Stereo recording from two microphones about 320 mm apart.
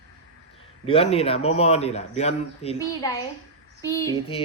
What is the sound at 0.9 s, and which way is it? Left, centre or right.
Speech, centre.